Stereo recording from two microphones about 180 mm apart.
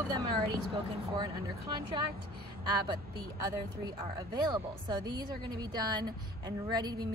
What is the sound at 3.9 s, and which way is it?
Speech, 20° right (ahead or behind).